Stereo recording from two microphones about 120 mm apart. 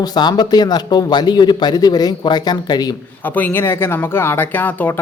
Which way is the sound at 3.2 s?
15° left (ahead or behind).